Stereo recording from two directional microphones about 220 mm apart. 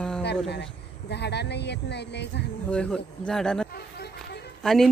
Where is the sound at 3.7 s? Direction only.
45° left (ahead or behind).